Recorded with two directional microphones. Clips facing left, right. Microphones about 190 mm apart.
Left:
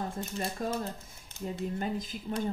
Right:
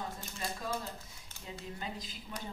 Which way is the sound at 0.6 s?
50° left (ahead or behind).